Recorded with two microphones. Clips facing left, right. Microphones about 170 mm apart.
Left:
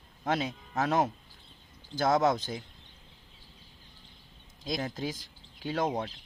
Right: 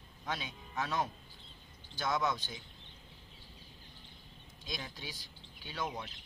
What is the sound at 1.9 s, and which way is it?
Speech, 40° left (ahead or behind).